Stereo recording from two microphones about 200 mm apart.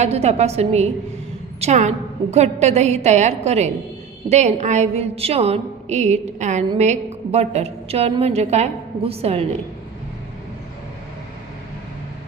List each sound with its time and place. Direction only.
0.0 s a woman's voice: 35° right (ahead or behind)